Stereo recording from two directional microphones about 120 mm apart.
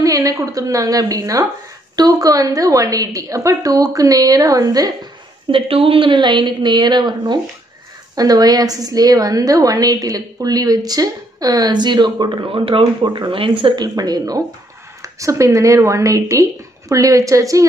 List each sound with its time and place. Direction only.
0.0 s a woman's voice: 30° right (ahead or behind)
5.5 s a woman's voice: 50° right (ahead or behind); by 17.6 s 25° right (ahead or behind)